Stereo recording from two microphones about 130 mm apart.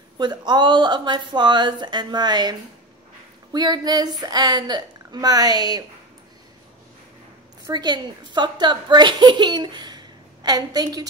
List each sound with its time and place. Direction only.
0.2 s a woman's voice: 35° right (ahead or behind)
3.5 s a woman's voice: 35° right (ahead or behind)
7.6 s a woman's voice: 35° right (ahead or behind)